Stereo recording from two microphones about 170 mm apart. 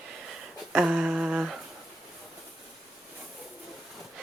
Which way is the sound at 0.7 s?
5° right (ahead or behind).